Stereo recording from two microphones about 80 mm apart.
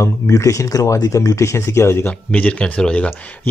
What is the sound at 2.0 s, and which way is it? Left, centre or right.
Speech, centre.